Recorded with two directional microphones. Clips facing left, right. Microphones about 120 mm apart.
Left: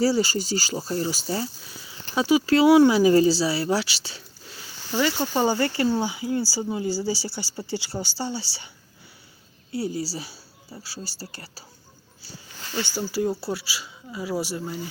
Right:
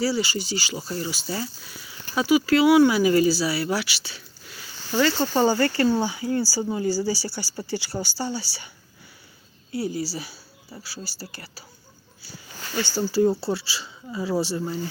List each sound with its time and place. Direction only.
0.0 s speech: 40° left (ahead or behind)
4.9 s speech: 15° left (ahead or behind)
9.7 s speech: 30° left (ahead or behind)
12.2 s a sound: 35° left (ahead or behind)
13.0 s speech: 10° left (ahead or behind)